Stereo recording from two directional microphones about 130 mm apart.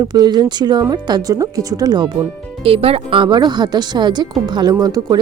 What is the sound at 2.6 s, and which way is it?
Speech, 45° right (ahead or behind).